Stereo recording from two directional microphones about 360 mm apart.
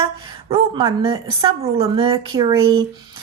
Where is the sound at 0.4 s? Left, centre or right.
Centre.